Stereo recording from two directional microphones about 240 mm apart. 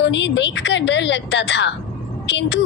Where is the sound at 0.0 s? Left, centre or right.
Left.